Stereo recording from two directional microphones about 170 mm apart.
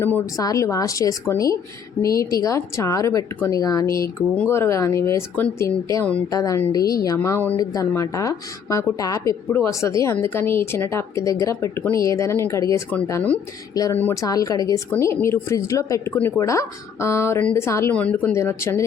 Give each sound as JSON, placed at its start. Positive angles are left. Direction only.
{"t": 0.0, "sound": "speech", "side_deg": 15}